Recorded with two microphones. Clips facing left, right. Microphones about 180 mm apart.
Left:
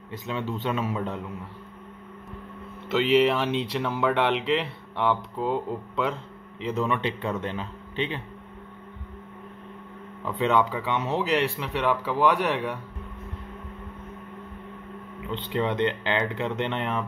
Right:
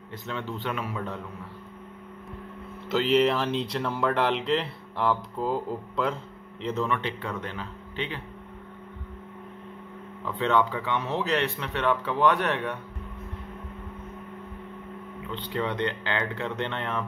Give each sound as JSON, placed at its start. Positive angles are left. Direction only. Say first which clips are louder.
{"t": 0.3, "sound": "speech", "louder": "left 3 dB", "side_deg": 15}
{"t": 2.9, "sound": "speech", "louder": "left 2 dB", "side_deg": 0}
{"t": 6.6, "sound": "speech", "louder": "left 2 dB", "side_deg": 10}
{"t": 10.2, "sound": "a man's voice", "louder": "left 1 dB", "side_deg": 15}
{"t": 15.3, "sound": "speech", "louder": "left 3 dB", "side_deg": 20}